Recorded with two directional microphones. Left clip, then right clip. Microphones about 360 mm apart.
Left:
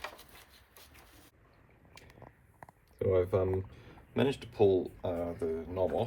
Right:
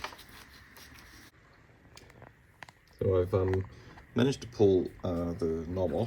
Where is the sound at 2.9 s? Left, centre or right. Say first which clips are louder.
Right 1 dB; centre.